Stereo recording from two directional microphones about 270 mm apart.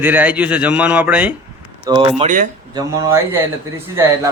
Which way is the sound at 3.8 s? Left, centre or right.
Centre.